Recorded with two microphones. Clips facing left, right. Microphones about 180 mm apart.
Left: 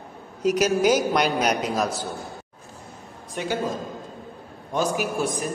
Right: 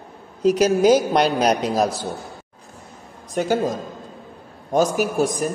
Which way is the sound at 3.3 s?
40° right (ahead or behind).